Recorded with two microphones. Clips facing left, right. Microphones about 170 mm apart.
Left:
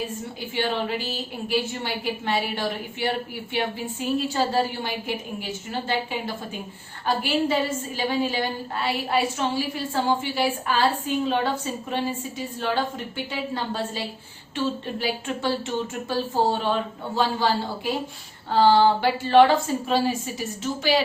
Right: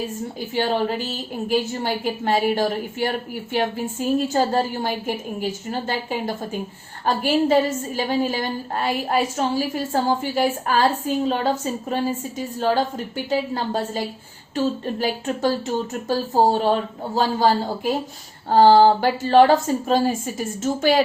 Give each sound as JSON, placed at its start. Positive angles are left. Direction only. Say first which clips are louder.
{"t": 0.5, "sound": "a woman's voice", "louder": "right 4 dB", "side_deg": -40}
{"t": 18.5, "sound": "a woman's voice", "louder": "right 5 dB", "side_deg": -40}